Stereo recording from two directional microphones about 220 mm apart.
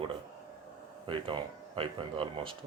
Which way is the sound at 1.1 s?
25° right (ahead or behind).